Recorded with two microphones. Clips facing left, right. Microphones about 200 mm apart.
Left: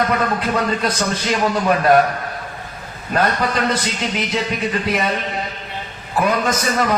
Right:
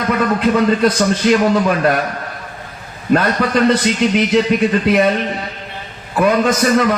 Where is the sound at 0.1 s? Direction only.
55° right (ahead or behind).